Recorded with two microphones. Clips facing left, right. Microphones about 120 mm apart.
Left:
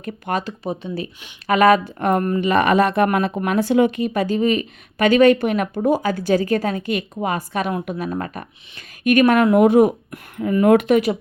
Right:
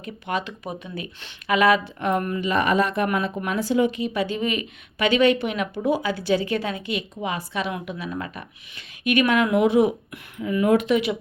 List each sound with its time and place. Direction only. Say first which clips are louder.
0.0 s speech: left 4 dB; 45° left (ahead or behind)
0.6 s speech: left 7 dB; 30° left (ahead or behind)
1.5 s speech: left 5 dB; 45° left (ahead or behind)
2.4 s speech: left 5 dB; 65° left (ahead or behind); by 11.2 s 45° left (ahead or behind)